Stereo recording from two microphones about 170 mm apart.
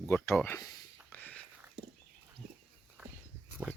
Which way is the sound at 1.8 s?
75° right (ahead or behind).